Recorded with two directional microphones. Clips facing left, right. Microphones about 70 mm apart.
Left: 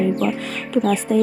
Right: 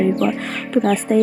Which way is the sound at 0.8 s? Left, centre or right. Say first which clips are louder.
Right 1 dB; right.